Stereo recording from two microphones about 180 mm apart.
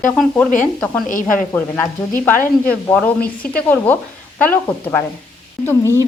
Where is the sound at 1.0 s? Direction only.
45° left (ahead or behind).